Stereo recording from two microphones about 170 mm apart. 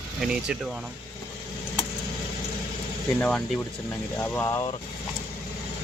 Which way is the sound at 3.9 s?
15° left (ahead or behind).